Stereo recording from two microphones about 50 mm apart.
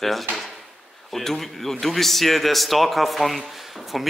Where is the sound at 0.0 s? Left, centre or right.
Centre.